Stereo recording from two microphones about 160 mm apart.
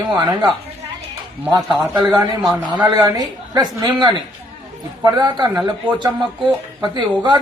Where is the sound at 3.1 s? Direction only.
25° right (ahead or behind).